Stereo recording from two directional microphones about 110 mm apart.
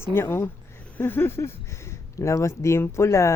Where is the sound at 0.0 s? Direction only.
20° left (ahead or behind).